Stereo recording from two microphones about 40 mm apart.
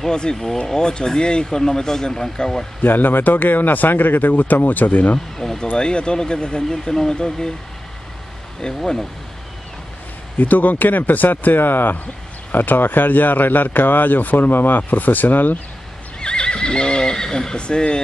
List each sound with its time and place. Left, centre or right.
0.1 s speech: centre
2.8 s speech: left
5.4 s vehicle: centre
5.8 s speech: left
8.5 s speech: centre
10.4 s speech: left
16.2 s neigh: left